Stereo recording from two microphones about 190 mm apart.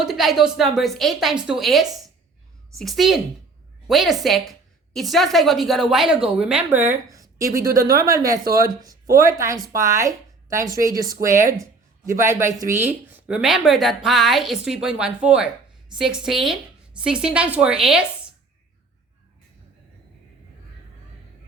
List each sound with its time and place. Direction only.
0.0 s speech: centre (ahead or behind)
6.9 s speech: 15° right (ahead or behind)